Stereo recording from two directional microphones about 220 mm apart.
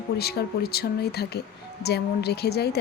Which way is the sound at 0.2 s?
45° left (ahead or behind).